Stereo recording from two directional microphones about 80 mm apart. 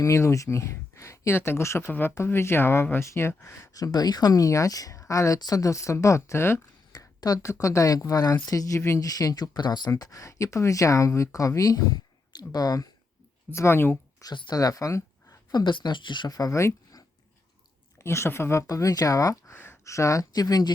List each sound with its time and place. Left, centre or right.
0.0 s speech: left
3.8 s speech: left
6.9 s a sound: left
7.4 s speech: left
9.6 s speech: left
9.9 s speech: left
13.5 s speech: left
14.5 s speech: left
15.6 s speech: left
16.3 s speech: left
18.0 s speech: left
18.7 s speech: left